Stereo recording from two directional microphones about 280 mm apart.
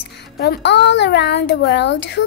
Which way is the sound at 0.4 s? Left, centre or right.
Left.